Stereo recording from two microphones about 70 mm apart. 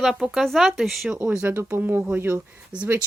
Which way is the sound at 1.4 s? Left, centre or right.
Right.